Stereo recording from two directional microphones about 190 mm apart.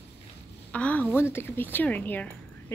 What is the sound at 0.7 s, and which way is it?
Speech, 5° left (ahead or behind).